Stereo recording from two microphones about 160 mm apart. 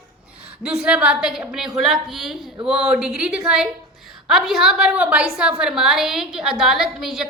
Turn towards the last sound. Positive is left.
turn(degrees=0)  # may be behind; listen again after turning